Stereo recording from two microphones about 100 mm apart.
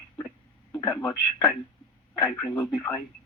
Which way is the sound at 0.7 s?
30° left (ahead or behind).